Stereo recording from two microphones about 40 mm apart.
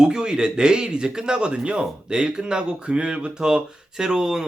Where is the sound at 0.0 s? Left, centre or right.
Centre.